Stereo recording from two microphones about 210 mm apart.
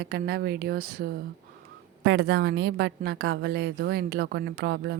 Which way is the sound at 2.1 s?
60° right (ahead or behind).